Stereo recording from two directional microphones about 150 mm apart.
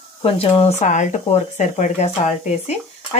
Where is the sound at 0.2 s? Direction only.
40° left (ahead or behind).